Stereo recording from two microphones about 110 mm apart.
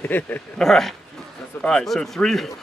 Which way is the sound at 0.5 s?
Centre (ahead or behind).